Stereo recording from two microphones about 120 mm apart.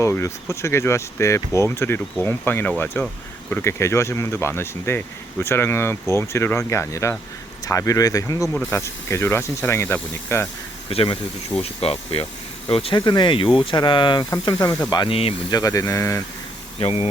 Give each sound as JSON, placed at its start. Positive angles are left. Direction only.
{"t": 0.0, "sound": "speech", "side_deg": 25}
{"t": 10.8, "sound": "speech", "side_deg": 50}
{"t": 13.1, "sound": "speech", "side_deg": 40}
{"t": 15.1, "sound": "speech", "side_deg": 50}
{"t": 15.4, "sound": "speech", "side_deg": 30}
{"t": 16.8, "sound": "speech", "side_deg": 55}